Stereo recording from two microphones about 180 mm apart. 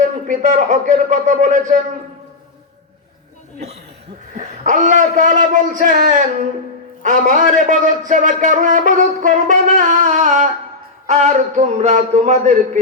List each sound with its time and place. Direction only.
0.0 s a man's voice: 45° right (ahead or behind)
4.4 s a man's voice: 40° right (ahead or behind)